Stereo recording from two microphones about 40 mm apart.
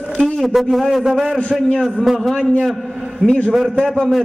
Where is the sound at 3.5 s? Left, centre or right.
Centre.